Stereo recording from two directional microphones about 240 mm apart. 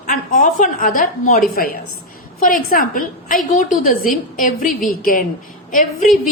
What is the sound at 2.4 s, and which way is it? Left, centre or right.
A woman's voice, left.